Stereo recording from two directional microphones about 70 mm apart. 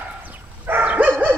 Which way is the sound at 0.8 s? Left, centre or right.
Right.